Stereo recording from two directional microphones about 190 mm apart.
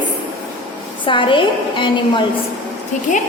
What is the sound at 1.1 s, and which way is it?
A woman's voice, 25° left (ahead or behind).